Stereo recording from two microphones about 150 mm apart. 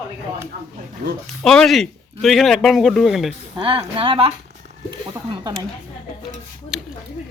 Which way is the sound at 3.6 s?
35° right (ahead or behind).